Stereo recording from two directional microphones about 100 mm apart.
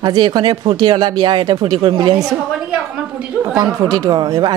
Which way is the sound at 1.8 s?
55° right (ahead or behind).